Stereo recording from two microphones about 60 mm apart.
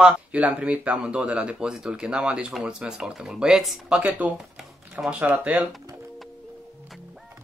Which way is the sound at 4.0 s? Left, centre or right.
Right.